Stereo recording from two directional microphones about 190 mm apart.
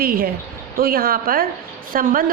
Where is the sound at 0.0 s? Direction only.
50° right (ahead or behind).